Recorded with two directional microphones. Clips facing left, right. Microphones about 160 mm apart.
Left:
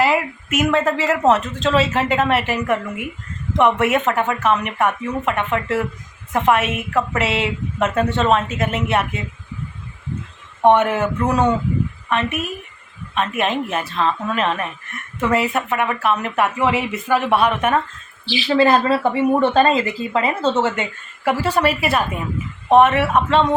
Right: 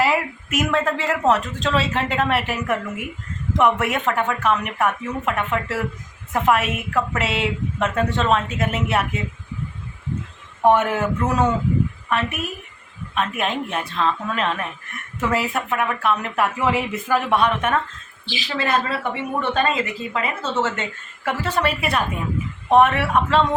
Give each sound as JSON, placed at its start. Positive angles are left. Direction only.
{"t": 0.0, "sound": "a sound", "side_deg": 0}
{"t": 1.3, "sound": "speech", "side_deg": 0}
{"t": 10.7, "sound": "speech", "side_deg": 0}
{"t": 13.1, "sound": "speech", "side_deg": 0}
{"t": 18.4, "sound": "a woman's voice", "side_deg": 35}
{"t": 20.6, "sound": "a woman's voice", "side_deg": 15}